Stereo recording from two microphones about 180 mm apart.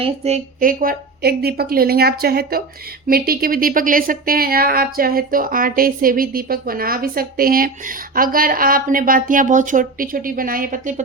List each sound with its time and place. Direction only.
0.0 s a woman's voice: 35° right (ahead or behind)
0.6 s a woman's voice: 50° right (ahead or behind)